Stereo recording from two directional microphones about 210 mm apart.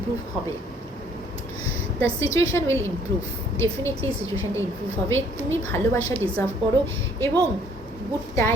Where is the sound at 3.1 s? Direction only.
65° right (ahead or behind).